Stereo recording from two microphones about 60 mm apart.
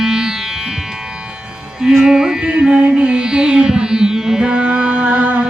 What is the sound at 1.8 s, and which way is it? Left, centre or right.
Music, centre.